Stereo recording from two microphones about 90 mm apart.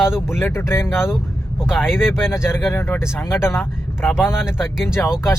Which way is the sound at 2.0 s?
25° left (ahead or behind).